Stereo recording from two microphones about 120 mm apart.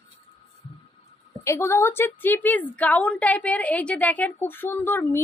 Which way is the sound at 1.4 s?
20° left (ahead or behind).